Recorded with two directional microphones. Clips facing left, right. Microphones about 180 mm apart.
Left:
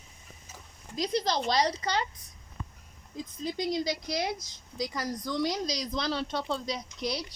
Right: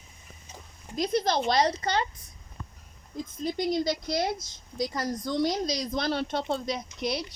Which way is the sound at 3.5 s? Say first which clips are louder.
Right 3 dB; 55° right (ahead or behind).